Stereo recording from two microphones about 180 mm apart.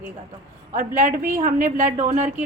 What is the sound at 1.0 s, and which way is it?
A woman's voice, 45° right (ahead or behind).